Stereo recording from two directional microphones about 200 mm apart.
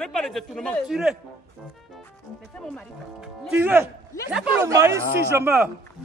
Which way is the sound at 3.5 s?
10° right (ahead or behind).